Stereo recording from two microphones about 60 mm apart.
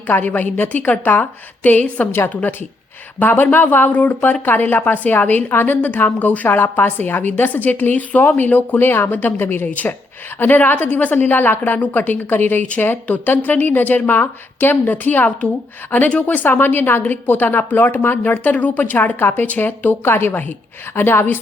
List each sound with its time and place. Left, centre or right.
0.1 s a woman's voice: left